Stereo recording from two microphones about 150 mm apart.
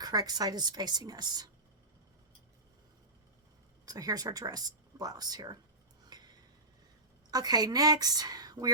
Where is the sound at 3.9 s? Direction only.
25° right (ahead or behind).